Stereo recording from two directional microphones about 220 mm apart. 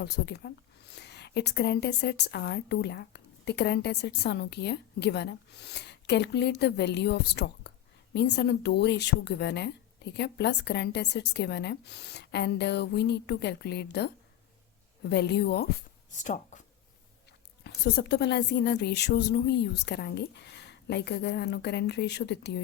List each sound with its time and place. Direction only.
0.0 s a woman's voice: 50° left (ahead or behind)
15.1 s speech: 50° left (ahead or behind)
16.1 s speech: 35° left (ahead or behind)
17.6 s a woman's voice: 50° left (ahead or behind)